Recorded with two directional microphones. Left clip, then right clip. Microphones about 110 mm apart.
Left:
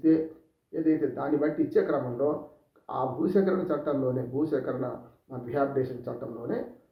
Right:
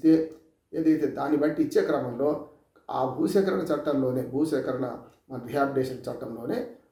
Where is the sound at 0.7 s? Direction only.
20° right (ahead or behind).